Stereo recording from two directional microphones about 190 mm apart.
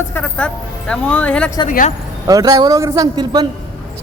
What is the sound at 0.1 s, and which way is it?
A man's voice, 5° left (ahead or behind).